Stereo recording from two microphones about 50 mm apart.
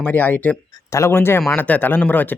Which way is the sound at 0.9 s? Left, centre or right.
Left.